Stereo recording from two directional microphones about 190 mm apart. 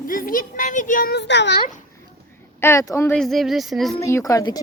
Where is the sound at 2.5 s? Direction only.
15° left (ahead or behind).